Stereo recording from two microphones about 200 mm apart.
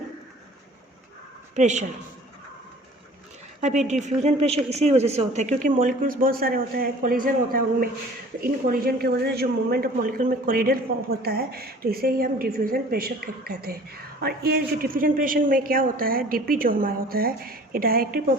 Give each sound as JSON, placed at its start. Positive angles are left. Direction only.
{"t": 1.5, "sound": "a woman's voice", "side_deg": -35}
{"t": 4.0, "sound": "a woman's voice", "side_deg": -35}